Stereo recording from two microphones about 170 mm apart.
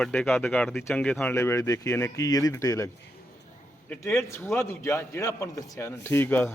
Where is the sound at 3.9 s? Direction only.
10° left (ahead or behind).